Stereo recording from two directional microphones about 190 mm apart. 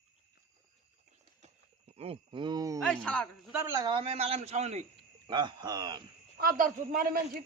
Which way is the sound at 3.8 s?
30° right (ahead or behind).